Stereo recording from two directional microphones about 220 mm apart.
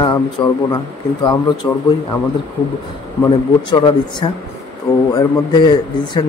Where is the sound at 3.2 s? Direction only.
20° left (ahead or behind).